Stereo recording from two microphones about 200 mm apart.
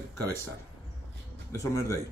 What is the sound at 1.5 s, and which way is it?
Speech, 15° left (ahead or behind).